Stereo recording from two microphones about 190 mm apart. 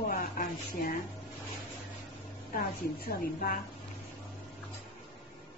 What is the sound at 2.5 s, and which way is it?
A woman's voice, 50° left (ahead or behind).